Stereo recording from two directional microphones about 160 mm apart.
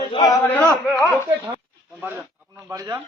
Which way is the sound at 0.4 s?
10° left (ahead or behind).